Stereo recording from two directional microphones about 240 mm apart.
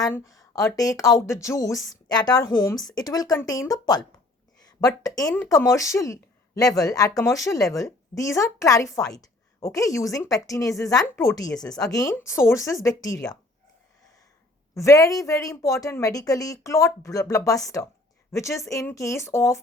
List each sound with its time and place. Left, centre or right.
0.0 s a woman's voice: centre
14.8 s speech: centre